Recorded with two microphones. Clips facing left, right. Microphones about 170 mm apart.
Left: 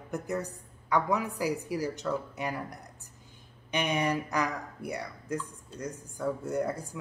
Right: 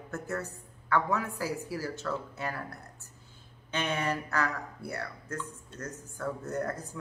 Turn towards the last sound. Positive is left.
turn(degrees=10)  # may be behind; listen again after turning